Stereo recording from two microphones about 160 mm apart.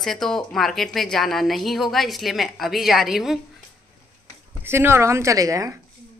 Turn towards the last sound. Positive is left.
turn(degrees=-20)  # may be behind; listen again after turning